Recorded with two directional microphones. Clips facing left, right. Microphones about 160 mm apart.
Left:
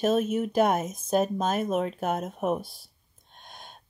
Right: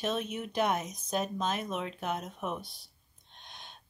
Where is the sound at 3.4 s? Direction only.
45° left (ahead or behind).